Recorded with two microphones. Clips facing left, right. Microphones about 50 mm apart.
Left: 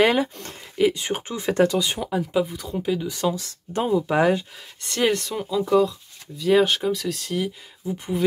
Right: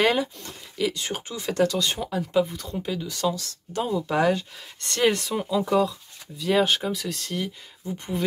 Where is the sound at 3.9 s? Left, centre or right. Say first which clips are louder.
Left 3 dB; centre.